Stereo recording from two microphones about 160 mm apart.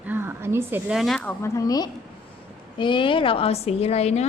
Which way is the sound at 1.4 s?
20° left (ahead or behind).